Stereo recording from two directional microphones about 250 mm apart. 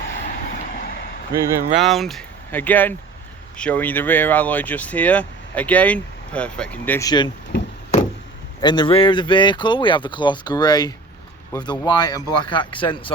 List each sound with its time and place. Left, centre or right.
0.1 s vehicle: left
1.3 s speech: centre
1.8 s speech: centre
8.6 s speech: centre